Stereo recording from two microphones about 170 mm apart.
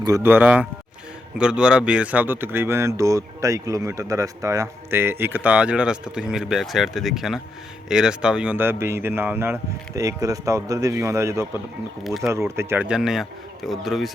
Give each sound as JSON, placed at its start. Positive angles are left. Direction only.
{"t": 0.0, "sound": "speech", "side_deg": -15}
{"t": 12.0, "sound": "speech", "side_deg": 0}
{"t": 12.3, "sound": "speech", "side_deg": -15}